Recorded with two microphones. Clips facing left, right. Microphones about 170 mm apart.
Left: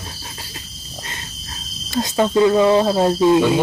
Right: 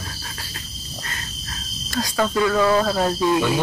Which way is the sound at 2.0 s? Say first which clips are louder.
Left 5 dB; 25° left (ahead or behind).